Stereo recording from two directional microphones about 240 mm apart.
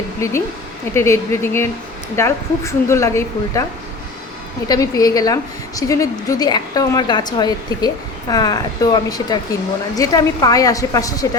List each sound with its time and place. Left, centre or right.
0.9 s a woman's voice: centre
4.7 s a woman's voice: centre